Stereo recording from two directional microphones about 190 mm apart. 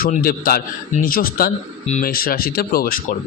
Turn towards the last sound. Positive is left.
turn(degrees=45)  # may be behind; listen again after turning